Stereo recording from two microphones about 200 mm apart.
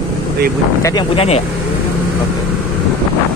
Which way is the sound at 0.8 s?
25° left (ahead or behind).